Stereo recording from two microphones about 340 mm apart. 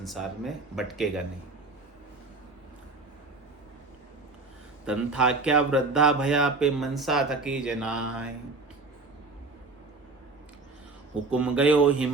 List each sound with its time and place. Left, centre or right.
0.0 s speech: centre
4.9 s speech: centre
11.1 s speech: centre